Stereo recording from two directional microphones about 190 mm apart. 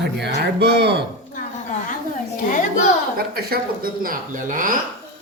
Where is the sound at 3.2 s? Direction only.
55° right (ahead or behind).